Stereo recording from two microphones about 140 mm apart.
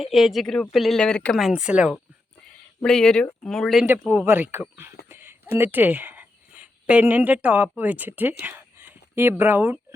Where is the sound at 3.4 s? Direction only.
5° left (ahead or behind).